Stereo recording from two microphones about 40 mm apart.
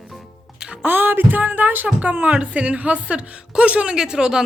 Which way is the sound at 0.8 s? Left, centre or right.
Right.